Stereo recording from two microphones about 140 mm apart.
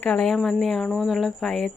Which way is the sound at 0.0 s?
10° left (ahead or behind).